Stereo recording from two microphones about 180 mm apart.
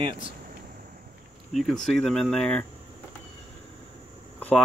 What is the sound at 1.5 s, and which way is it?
Speech, 5° left (ahead or behind).